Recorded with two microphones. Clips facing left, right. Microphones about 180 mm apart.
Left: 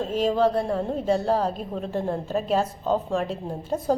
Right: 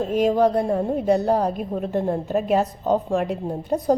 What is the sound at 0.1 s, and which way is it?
A woman's voice, 15° right (ahead or behind).